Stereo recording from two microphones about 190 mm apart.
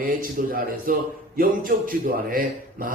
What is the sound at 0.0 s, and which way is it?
Speech, 45° right (ahead or behind).